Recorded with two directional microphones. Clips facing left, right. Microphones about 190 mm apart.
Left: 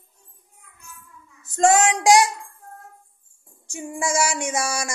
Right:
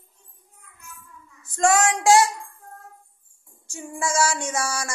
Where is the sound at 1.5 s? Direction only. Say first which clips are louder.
Left 2 dB; 25° left (ahead or behind).